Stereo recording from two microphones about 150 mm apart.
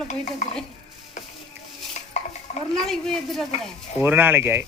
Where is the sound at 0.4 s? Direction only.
55° left (ahead or behind).